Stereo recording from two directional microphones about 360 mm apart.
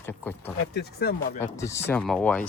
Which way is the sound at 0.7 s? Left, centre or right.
Left.